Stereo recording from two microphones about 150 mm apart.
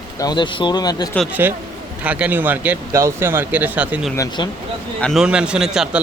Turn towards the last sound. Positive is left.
turn(degrees=-5)  # may be behind; listen again after turning